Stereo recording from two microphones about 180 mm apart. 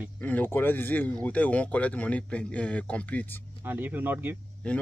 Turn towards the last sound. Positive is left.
turn(degrees=5)  # may be behind; listen again after turning